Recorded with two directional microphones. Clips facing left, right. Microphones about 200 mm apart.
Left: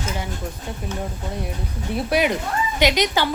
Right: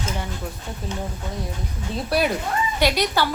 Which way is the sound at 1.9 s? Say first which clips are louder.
Left 2 dB; 15° left (ahead or behind).